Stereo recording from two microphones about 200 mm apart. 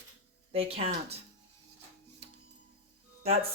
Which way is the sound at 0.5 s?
30° right (ahead or behind).